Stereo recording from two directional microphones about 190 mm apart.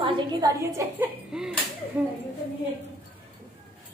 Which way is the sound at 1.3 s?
5° right (ahead or behind).